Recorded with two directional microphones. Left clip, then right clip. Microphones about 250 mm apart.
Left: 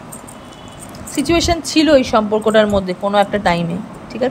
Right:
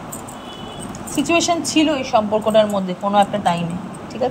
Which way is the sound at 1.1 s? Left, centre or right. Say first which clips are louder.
Left 1 dB; centre.